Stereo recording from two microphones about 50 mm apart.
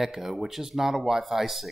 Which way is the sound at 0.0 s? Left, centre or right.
Centre.